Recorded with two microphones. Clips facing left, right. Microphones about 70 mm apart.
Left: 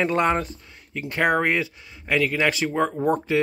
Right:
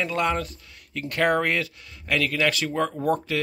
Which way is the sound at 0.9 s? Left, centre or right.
Centre.